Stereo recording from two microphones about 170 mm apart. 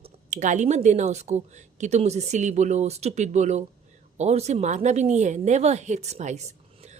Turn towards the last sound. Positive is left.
turn(degrees=-40)  # may be behind; listen again after turning